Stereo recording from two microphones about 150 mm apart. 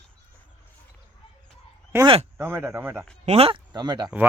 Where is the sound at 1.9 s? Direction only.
15° right (ahead or behind).